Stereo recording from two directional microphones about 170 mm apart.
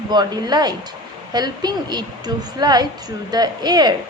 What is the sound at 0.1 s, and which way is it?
A woman's voice, 25° right (ahead or behind).